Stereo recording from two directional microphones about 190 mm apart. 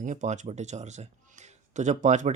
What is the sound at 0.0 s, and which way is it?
A man's voice, 40° right (ahead or behind).